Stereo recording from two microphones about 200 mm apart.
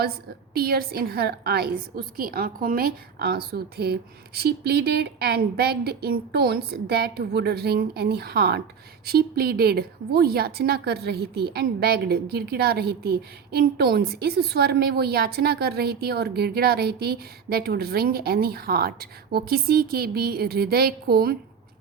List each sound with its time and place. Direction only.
0.5 s a woman's voice: 50° right (ahead or behind)